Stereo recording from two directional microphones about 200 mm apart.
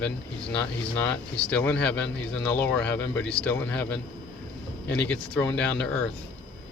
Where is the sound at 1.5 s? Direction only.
5° left (ahead or behind).